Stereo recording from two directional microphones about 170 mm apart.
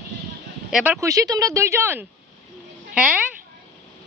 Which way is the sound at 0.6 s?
5° right (ahead or behind).